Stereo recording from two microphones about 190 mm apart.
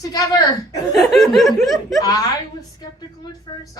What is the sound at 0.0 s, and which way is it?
Speech, 20° left (ahead or behind).